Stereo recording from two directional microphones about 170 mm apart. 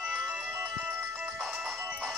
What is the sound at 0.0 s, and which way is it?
Ringtone, 5° right (ahead or behind).